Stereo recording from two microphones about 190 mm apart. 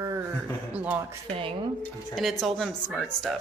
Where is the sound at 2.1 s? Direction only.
Centre (ahead or behind).